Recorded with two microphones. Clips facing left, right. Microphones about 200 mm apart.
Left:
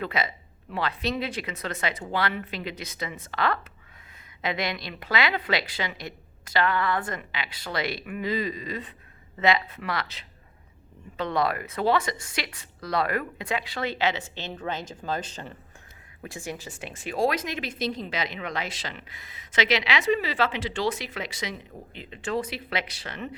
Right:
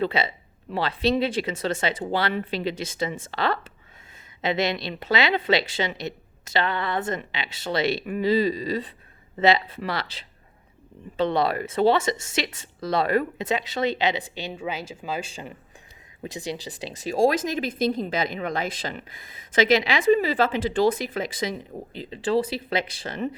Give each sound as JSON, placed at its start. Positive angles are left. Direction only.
{"t": 0.0, "sound": "a woman's voice", "side_deg": -30}
{"t": 16.2, "sound": "a woman's voice", "side_deg": -20}
{"t": 16.6, "sound": "speech", "side_deg": -40}